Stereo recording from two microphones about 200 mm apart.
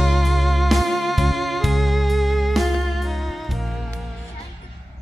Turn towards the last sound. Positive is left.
turn(degrees=0)  # may be behind; listen again after turning